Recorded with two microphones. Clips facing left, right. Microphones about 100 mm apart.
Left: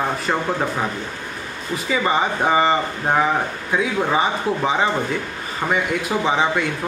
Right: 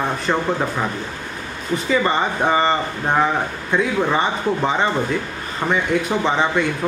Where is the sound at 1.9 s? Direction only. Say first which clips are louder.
Even; 5° left (ahead or behind).